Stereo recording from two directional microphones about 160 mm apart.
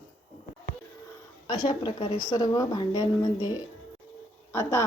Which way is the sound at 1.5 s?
30° left (ahead or behind).